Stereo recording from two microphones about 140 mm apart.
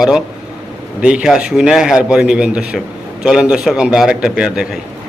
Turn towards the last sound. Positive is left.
turn(degrees=-5)  # may be behind; listen again after turning